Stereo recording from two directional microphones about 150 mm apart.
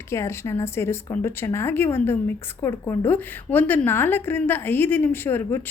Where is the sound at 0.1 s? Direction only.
20° left (ahead or behind).